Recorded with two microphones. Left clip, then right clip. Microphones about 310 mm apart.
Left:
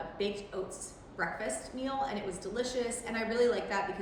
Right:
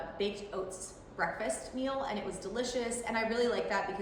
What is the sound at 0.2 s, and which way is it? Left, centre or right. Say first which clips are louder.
A woman's voice: even; centre.